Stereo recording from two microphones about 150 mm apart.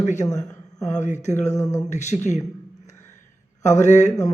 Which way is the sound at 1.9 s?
50° left (ahead or behind).